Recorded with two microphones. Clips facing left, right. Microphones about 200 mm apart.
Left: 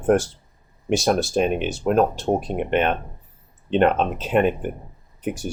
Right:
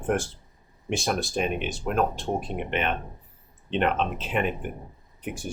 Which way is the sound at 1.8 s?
40° left (ahead or behind).